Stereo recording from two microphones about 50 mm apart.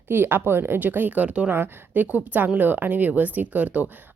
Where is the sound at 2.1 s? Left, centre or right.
Right.